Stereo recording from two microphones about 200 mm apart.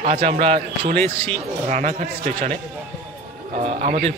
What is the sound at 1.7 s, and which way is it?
Speech, 35° right (ahead or behind).